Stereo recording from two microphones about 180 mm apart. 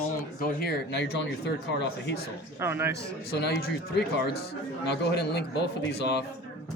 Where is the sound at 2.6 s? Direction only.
15° right (ahead or behind).